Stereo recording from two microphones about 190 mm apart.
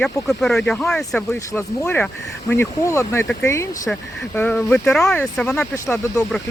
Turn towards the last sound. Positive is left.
turn(degrees=15)  # may be behind; listen again after turning